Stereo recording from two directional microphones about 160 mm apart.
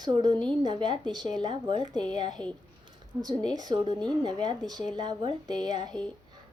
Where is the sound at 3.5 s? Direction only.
25° right (ahead or behind).